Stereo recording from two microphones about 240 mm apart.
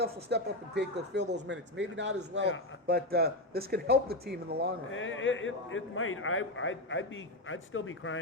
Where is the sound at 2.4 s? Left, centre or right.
Left.